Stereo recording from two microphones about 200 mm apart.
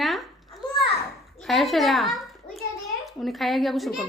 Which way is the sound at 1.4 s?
Centre (ahead or behind).